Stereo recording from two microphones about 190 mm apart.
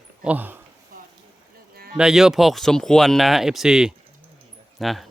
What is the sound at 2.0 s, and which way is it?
Speech, 5° right (ahead or behind).